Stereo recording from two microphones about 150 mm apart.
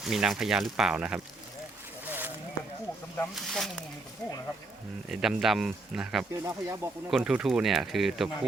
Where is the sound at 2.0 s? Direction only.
15° right (ahead or behind).